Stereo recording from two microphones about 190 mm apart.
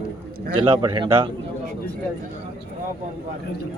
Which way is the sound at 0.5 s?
25° right (ahead or behind).